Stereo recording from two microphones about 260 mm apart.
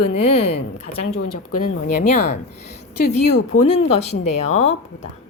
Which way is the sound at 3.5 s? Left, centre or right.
Left.